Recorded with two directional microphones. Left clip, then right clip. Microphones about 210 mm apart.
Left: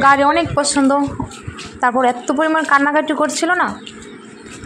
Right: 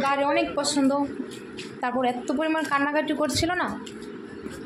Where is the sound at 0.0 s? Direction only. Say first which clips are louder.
Left 11 dB; 30° left (ahead or behind).